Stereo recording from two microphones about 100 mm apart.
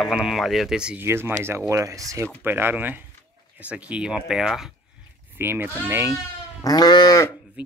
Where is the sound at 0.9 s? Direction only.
20° right (ahead or behind).